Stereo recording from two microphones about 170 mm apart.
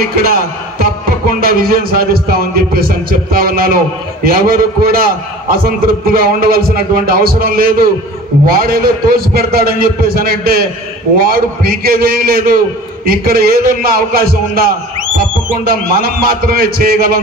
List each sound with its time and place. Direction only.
0.0 s a man's voice: 60° right (ahead or behind)